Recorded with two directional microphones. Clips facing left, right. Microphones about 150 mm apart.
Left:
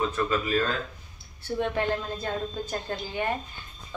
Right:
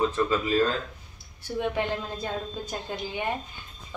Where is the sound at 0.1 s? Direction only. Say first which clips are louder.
Right 1 dB; 25° right (ahead or behind).